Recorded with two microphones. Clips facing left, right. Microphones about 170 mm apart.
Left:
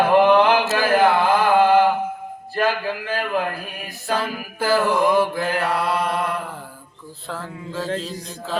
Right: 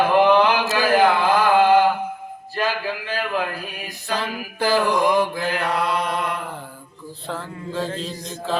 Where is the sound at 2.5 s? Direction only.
50° left (ahead or behind).